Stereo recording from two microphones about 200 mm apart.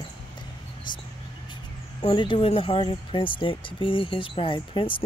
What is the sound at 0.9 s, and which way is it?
Speech, 25° left (ahead or behind).